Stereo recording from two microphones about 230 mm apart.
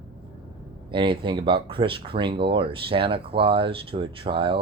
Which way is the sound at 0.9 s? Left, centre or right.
Right.